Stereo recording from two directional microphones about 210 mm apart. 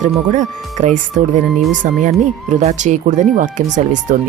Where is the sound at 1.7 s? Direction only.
35° right (ahead or behind).